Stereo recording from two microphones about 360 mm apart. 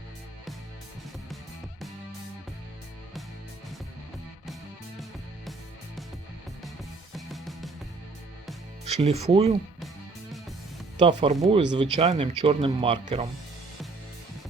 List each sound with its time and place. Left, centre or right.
7.3 s music: centre
8.8 s speech: centre
10.9 s speech: centre